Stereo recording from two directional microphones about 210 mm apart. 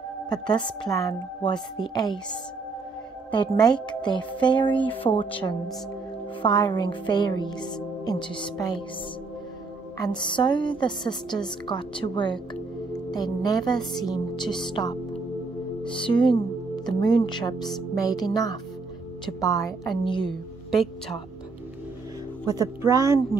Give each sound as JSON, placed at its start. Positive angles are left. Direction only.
{"t": 0.3, "sound": "a woman's voice", "side_deg": 20}
{"t": 3.3, "sound": "a woman's voice", "side_deg": 20}
{"t": 9.9, "sound": "a woman's voice", "side_deg": 20}
{"t": 20.2, "sound": "speech", "side_deg": 0}
{"t": 22.5, "sound": "speech", "side_deg": -15}